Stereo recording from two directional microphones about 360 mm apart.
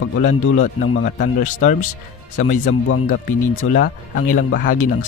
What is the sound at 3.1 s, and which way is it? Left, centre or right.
Speech, left.